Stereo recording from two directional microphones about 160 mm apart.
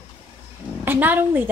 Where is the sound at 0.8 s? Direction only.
10° right (ahead or behind).